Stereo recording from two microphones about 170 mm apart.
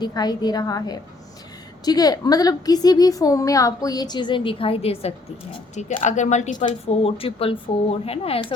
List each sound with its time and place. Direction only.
0.0 s a woman's voice: 25° left (ahead or behind)
5.7 s a woman's voice: 45° left (ahead or behind)